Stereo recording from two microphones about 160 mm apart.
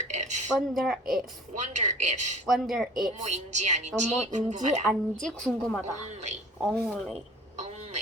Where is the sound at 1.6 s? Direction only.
45° right (ahead or behind).